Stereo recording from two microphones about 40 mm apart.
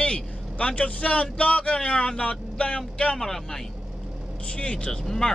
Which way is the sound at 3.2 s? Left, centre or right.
Centre.